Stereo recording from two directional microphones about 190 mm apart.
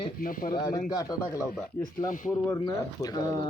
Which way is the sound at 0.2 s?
45° left (ahead or behind).